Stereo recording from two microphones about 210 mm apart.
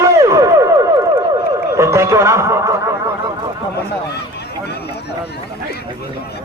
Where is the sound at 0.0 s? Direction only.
15° right (ahead or behind).